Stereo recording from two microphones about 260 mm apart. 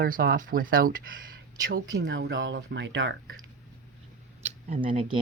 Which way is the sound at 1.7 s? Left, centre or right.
Right.